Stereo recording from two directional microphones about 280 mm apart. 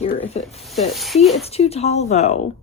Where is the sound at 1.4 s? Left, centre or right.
Left.